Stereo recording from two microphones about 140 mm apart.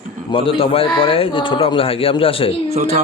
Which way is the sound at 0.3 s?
40° left (ahead or behind).